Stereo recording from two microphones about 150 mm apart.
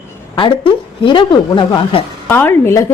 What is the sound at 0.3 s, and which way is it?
A woman's voice, 35° left (ahead or behind).